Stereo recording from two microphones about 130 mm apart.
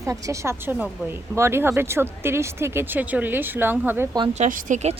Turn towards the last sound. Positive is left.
turn(degrees=-65)  # may be behind; listen again after turning